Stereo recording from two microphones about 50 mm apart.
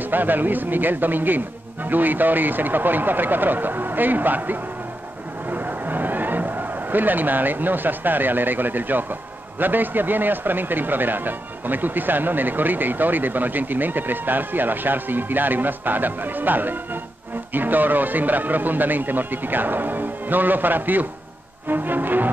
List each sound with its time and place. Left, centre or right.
0.1 s speech: right
5.5 s a sound: right
9.6 s speech: right